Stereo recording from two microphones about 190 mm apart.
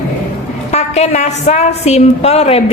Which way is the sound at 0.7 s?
35° left (ahead or behind).